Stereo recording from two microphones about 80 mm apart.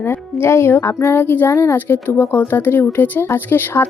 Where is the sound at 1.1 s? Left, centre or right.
Left.